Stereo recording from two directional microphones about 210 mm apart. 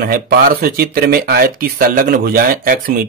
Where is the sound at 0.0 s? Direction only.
45° right (ahead or behind).